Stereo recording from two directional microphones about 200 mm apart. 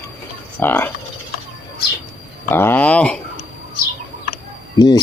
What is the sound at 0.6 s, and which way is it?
Speech, 10° left (ahead or behind).